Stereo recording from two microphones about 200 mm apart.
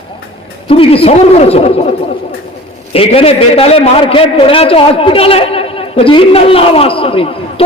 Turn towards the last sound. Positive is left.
turn(degrees=25)  # may be behind; listen again after turning